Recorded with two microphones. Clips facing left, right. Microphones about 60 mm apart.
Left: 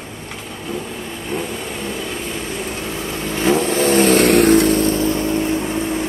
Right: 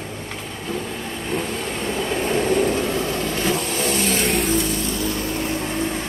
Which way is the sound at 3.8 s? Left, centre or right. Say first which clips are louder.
Left 10 dB; left.